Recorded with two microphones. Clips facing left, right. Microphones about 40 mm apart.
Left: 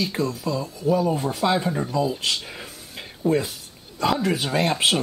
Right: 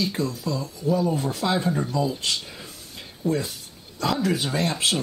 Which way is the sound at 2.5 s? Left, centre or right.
Left.